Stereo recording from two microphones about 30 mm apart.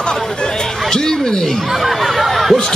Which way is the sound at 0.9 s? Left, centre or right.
Left.